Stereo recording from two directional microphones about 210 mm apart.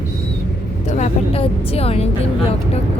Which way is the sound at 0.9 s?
35° left (ahead or behind).